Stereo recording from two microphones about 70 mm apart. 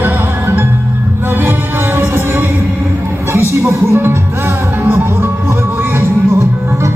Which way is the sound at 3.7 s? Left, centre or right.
Right.